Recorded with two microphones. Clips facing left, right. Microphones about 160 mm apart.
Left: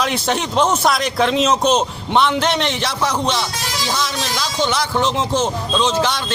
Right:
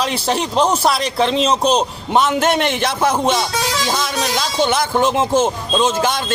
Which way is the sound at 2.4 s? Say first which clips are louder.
Right 3 dB; 50° right (ahead or behind).